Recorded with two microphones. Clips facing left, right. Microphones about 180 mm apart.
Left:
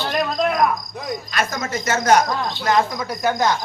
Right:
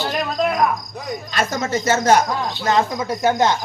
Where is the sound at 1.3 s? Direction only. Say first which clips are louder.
Right 4 dB; 30° right (ahead or behind).